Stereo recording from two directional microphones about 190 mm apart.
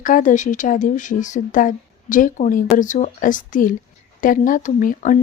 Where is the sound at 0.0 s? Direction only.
45° left (ahead or behind).